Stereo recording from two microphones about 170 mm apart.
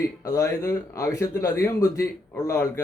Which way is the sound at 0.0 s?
20° left (ahead or behind).